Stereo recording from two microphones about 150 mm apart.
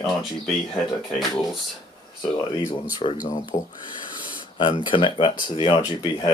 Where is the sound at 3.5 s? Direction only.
45° left (ahead or behind).